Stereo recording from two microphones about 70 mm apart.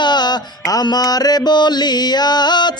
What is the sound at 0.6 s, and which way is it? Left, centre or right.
Music, left.